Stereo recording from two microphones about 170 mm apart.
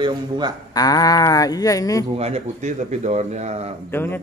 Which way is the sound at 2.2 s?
40° right (ahead or behind).